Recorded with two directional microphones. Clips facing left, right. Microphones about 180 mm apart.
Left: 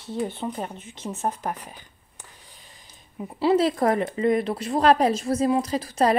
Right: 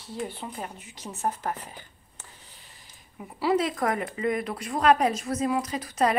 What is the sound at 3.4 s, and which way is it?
Speech, 30° left (ahead or behind).